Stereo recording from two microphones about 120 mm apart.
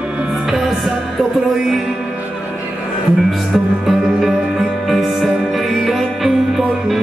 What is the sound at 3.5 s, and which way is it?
Music, 5° right (ahead or behind).